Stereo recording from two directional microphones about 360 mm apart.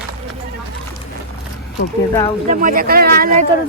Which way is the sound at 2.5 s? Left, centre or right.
Right.